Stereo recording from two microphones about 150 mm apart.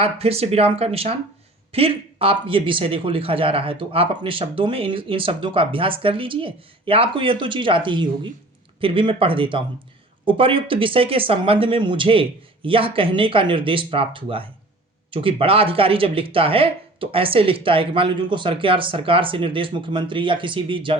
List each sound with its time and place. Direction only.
0.0 s speech: 40° right (ahead or behind)